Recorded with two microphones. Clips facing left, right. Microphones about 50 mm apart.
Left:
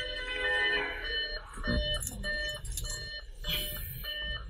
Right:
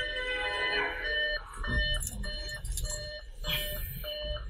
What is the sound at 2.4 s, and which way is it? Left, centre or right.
Alarm clock, left.